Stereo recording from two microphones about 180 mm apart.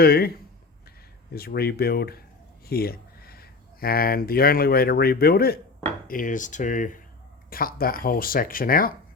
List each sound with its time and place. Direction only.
0.0 s speech: 60° left (ahead or behind)